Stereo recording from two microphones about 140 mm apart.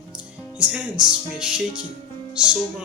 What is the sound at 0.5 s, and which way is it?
Speech, 10° right (ahead or behind).